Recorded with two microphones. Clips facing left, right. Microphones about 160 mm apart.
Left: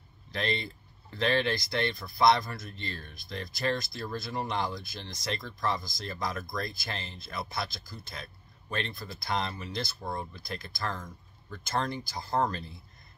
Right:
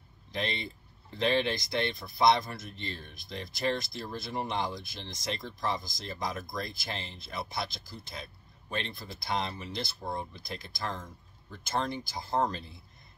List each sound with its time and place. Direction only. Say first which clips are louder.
0.3 s speech: left 2 dB; 20° right (ahead or behind)
8.6 s speech: left 1 dB; 20° right (ahead or behind)